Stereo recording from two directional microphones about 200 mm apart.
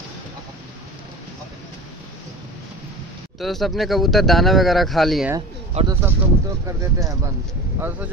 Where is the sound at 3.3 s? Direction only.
Centre (ahead or behind).